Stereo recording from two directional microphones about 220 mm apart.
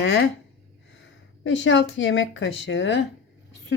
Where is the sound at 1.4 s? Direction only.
55° left (ahead or behind).